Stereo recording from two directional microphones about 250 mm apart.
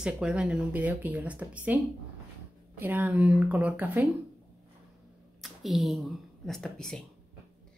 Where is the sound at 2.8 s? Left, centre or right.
Centre.